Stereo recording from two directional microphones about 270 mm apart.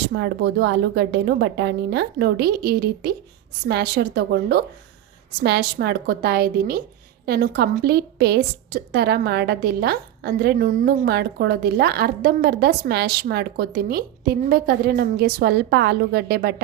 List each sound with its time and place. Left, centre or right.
0.0 s a woman's voice: right